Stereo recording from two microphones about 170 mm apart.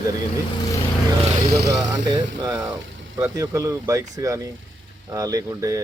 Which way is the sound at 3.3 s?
15° right (ahead or behind).